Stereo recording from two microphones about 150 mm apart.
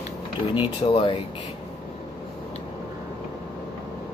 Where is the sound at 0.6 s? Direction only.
35° left (ahead or behind).